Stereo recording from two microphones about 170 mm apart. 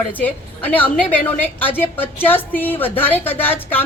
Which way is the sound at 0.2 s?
10° left (ahead or behind).